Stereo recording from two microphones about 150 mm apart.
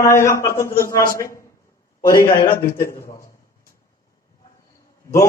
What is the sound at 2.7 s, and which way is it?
Speech, 15° left (ahead or behind).